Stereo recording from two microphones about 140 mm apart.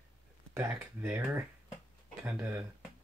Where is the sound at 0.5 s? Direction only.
20° right (ahead or behind).